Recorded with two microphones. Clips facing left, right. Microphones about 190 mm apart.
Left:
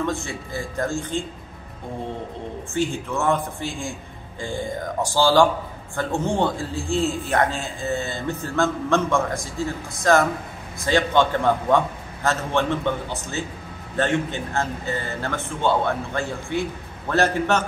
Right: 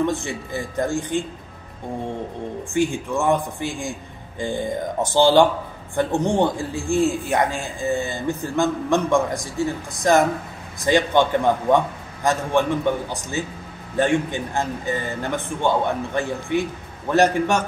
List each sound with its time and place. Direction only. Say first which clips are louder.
0.0 s a man's voice: right 3 dB; 20° right (ahead or behind)
2.7 s a man's voice: right 3 dB; 15° right (ahead or behind)